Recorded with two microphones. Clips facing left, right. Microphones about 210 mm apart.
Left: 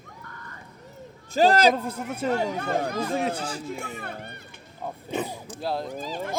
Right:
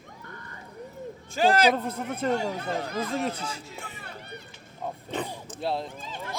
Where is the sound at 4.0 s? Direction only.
55° left (ahead or behind).